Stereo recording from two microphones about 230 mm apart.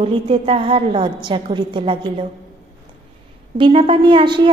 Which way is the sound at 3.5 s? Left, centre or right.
Right.